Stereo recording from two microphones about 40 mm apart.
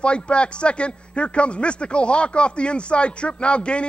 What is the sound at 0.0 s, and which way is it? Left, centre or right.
A man's voice, left.